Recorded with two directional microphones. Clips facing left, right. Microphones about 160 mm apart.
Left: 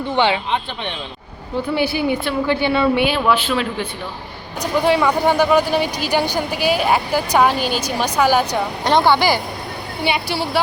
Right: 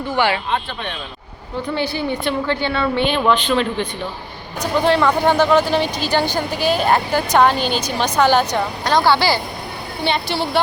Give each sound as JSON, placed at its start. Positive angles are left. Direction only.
{"t": 0.1, "sound": "speech", "side_deg": 20}
{"t": 1.6, "sound": "a woman's voice", "side_deg": 10}
{"t": 8.8, "sound": "a woman's voice", "side_deg": 25}